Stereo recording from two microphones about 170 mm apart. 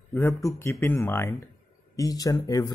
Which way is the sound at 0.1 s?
15° left (ahead or behind).